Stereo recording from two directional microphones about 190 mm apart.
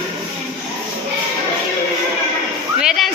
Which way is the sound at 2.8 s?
5° right (ahead or behind).